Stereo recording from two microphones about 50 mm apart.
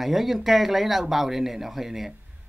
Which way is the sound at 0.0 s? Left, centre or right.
Centre.